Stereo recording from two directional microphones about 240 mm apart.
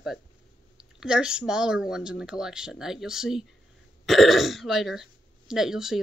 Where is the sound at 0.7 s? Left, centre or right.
Centre.